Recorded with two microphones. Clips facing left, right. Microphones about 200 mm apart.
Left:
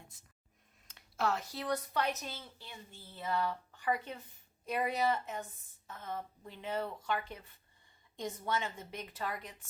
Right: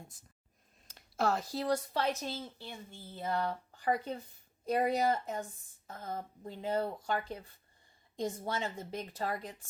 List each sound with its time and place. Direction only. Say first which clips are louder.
0.9 s speech: right 3 dB; 40° right (ahead or behind)